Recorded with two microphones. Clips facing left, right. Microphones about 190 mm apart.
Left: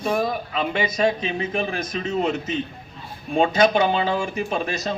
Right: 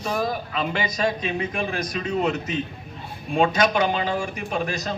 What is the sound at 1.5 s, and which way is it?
Speech, 25° left (ahead or behind).